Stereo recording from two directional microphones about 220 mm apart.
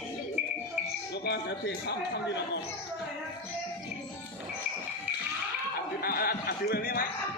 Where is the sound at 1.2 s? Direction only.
50° left (ahead or behind).